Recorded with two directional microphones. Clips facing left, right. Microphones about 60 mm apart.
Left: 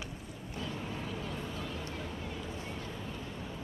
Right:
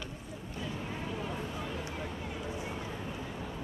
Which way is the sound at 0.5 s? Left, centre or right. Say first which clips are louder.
Even; centre.